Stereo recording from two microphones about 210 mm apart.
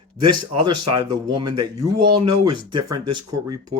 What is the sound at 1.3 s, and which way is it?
Speech, 20° right (ahead or behind).